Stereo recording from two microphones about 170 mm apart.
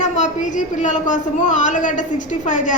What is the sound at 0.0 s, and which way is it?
A woman's voice, 45° left (ahead or behind).